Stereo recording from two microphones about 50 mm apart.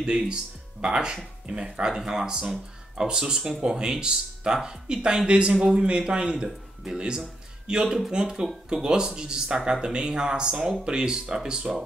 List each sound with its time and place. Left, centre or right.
0.0 s speech: centre